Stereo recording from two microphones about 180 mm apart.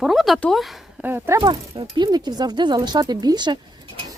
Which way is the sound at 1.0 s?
15° right (ahead or behind).